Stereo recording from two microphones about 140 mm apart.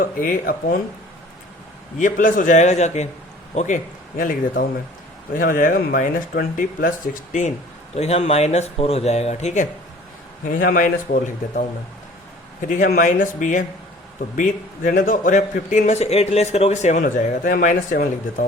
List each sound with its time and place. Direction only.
0.0 s speech: 80° left
2.0 s a man's voice: 70° left (ahead or behind); by 3.8 s 55° left (ahead or behind)
4.2 s speech: 80° left
7.9 s speech: 50° left (ahead or behind)
10.5 s speech: 75° left (ahead or behind)
12.6 s a man's voice: 70° left (ahead or behind)